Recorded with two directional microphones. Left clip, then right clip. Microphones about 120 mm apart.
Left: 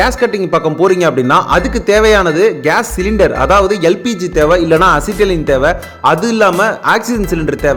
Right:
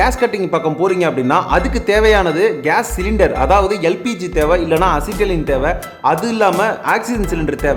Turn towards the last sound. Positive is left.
turn(degrees=30)  # may be behind; listen again after turning